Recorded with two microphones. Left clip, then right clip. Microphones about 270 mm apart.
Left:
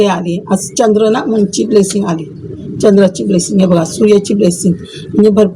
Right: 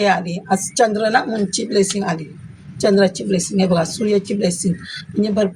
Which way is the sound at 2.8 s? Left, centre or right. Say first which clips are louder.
Left 6 dB; right.